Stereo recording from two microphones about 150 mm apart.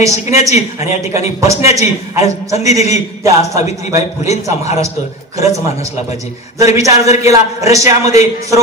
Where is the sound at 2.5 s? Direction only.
45° left (ahead or behind).